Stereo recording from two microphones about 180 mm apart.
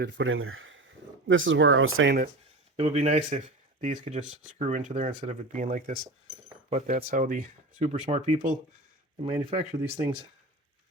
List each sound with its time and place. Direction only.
0.0 s speech: 90° right
2.7 s speech: 35° right (ahead or behind)
9.2 s speech: 30° right (ahead or behind)